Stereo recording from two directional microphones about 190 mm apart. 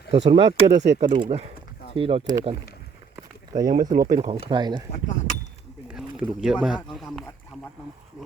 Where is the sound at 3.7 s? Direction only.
40° right (ahead or behind).